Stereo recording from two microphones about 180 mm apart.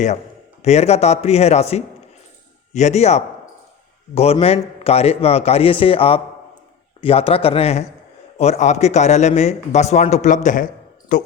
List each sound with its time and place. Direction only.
0.6 s speech: 40° left (ahead or behind)